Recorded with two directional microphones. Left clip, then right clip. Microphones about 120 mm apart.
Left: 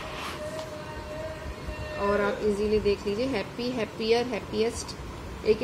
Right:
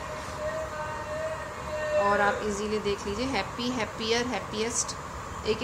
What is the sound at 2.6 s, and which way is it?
Speech, 15° left (ahead or behind).